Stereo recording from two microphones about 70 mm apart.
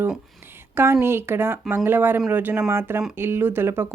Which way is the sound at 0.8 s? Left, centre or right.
Right.